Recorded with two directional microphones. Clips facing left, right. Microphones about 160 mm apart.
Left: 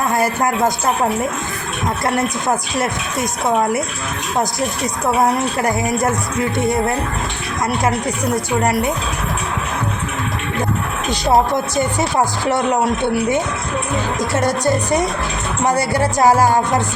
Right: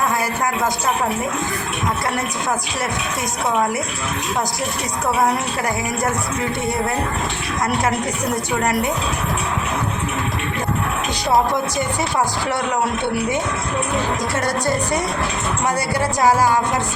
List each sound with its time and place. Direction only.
14.4 s speech: 20° left (ahead or behind)